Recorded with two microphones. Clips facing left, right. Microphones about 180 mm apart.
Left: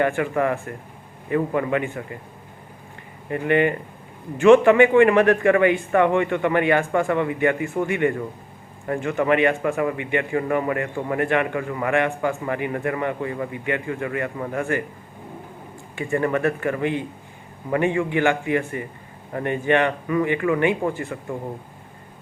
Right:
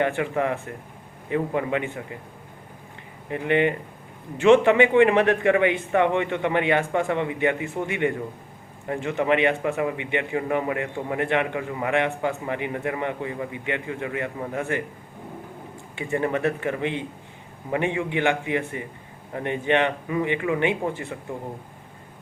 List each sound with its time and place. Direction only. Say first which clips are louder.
0.2 s a man's voice: left 3 dB; 20° right (ahead or behind)
3.3 s a man's voice: left 2 dB; 20° right (ahead or behind)
16.0 s a man's voice: left 3 dB; 20° right (ahead or behind)